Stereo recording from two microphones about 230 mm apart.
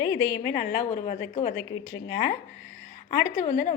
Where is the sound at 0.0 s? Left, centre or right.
Centre.